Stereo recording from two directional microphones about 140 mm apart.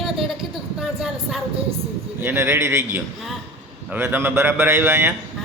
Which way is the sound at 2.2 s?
15° right (ahead or behind).